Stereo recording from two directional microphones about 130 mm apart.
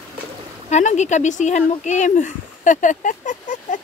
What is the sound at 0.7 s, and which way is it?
Speech, 60° left (ahead or behind).